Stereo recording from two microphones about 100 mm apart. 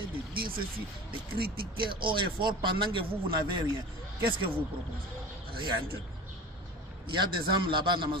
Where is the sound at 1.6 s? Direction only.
55° right (ahead or behind).